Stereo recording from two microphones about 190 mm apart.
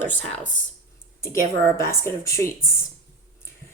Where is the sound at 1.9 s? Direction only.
15° left (ahead or behind).